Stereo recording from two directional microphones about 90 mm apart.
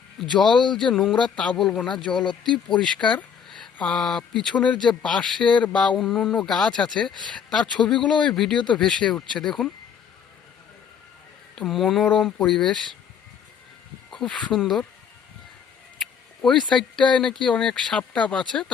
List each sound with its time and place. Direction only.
0.2 s speech: 5° left (ahead or behind)
8.5 s speech: 60° left (ahead or behind)
8.8 s speech: 10° left (ahead or behind)
11.5 s speech: centre (ahead or behind)
12.0 s speech: 15° left (ahead or behind)
14.1 s speech: 10° left (ahead or behind)
16.0 s speech: 5° left (ahead or behind)